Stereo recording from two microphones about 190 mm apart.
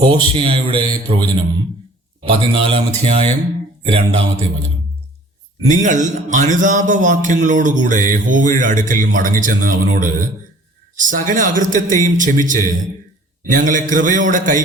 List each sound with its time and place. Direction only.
0.0 s a man's voice: 25° right (ahead or behind)
5.8 s speech: 40° right (ahead or behind)